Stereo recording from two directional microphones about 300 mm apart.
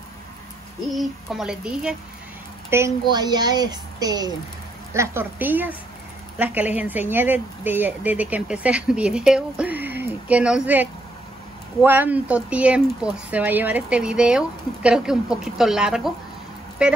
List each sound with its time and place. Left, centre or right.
0.9 s a woman's voice: centre